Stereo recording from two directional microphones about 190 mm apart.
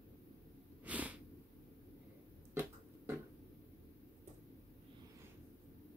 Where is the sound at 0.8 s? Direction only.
5° right (ahead or behind).